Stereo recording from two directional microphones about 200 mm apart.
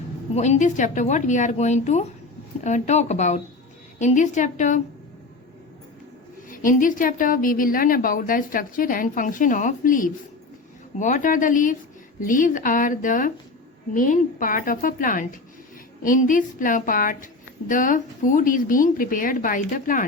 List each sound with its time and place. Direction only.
0.3 s a woman's voice: 35° left (ahead or behind)
6.5 s a woman's voice: 40° left (ahead or behind)